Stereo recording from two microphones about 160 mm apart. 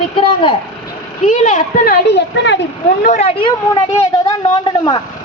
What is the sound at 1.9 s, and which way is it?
Speech, 90° left.